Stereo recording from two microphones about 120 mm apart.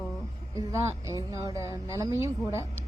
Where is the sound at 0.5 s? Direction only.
25° right (ahead or behind).